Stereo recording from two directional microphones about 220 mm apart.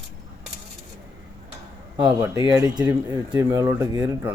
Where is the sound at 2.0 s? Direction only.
20° right (ahead or behind).